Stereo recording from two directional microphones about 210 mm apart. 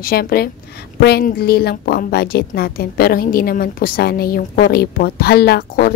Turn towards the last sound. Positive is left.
turn(degrees=50)  # may be behind; listen again after turning